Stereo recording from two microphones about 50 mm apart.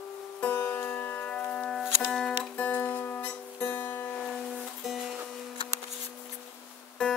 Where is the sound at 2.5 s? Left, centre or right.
Left.